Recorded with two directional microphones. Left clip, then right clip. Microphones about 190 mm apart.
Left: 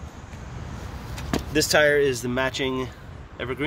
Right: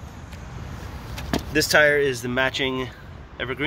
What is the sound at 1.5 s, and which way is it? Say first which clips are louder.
Speech: right 2 dB; 10° left (ahead or behind).